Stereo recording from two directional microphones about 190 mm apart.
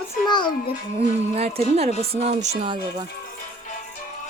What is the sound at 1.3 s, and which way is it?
Speech, 35° right (ahead or behind).